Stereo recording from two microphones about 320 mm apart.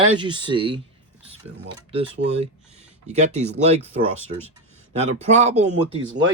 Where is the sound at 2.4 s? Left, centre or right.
Centre.